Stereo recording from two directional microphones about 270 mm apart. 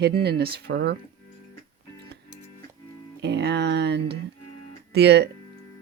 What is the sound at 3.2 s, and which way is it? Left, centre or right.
Speech, right.